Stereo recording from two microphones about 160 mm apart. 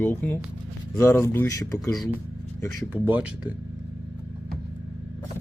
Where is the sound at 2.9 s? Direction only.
10° right (ahead or behind).